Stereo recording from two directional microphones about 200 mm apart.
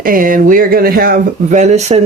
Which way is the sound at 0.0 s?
45° right (ahead or behind).